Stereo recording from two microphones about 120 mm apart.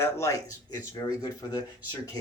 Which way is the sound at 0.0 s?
25° left (ahead or behind).